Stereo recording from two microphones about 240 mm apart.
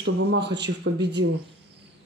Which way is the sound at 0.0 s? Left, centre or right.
Right.